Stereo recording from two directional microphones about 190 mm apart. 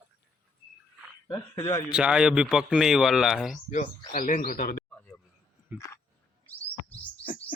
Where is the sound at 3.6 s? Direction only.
35° left (ahead or behind).